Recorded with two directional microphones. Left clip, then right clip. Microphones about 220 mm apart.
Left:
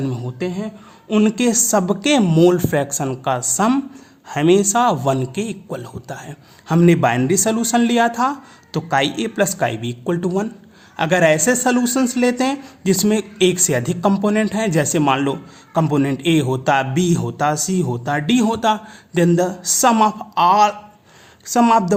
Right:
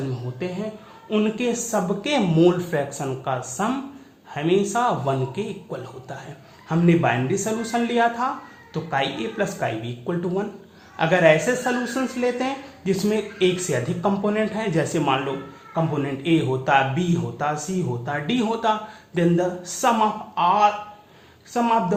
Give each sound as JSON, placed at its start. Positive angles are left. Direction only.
{"t": 0.3, "sound": "a man's voice", "side_deg": 50}